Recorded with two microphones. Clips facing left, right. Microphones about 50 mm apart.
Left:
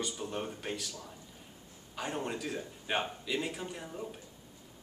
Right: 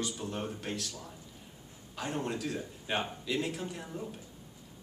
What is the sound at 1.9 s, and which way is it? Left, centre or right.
A man's voice, centre.